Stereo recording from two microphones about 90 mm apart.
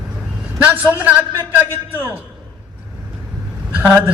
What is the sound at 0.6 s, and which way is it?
Speech, 20° right (ahead or behind).